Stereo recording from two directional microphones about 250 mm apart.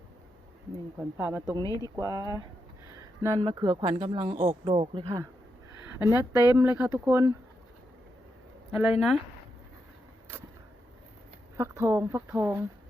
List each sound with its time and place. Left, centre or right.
1.1 s speech: centre
1.6 s speech: centre
2.0 s speech: centre
8.7 s speech: centre
11.5 s speech: centre